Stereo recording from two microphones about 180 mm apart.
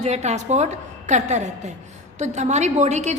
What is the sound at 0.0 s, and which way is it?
A woman's voice, 40° right (ahead or behind).